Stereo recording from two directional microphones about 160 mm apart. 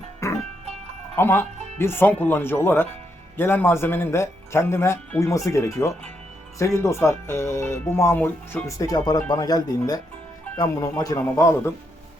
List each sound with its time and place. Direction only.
0.2 s music: 20° left (ahead or behind)
1.1 s a man's voice: 15° left (ahead or behind)